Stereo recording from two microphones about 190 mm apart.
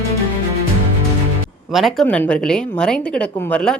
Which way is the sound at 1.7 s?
Centre (ahead or behind).